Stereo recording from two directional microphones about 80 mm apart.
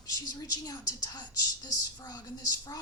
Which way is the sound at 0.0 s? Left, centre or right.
Left.